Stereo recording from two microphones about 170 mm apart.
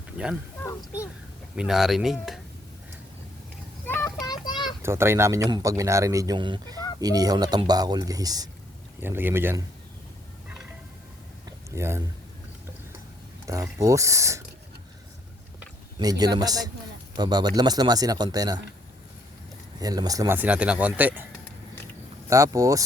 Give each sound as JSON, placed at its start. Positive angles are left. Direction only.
{"t": 0.6, "sound": "speech", "side_deg": 15}
{"t": 1.5, "sound": "speech", "side_deg": -5}
{"t": 3.8, "sound": "a sound", "side_deg": 10}
{"t": 4.3, "sound": "a sound", "side_deg": 25}
{"t": 4.8, "sound": "speech", "side_deg": -15}
{"t": 11.7, "sound": "speech", "side_deg": -15}
{"t": 13.5, "sound": "speech", "side_deg": -20}
{"t": 16.0, "sound": "speech", "side_deg": -25}
{"t": 19.8, "sound": "speech", "side_deg": -20}
{"t": 22.3, "sound": "speech", "side_deg": -20}